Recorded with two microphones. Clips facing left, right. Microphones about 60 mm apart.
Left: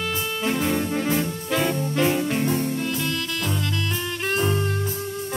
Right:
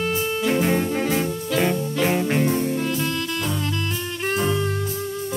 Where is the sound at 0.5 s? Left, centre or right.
Right.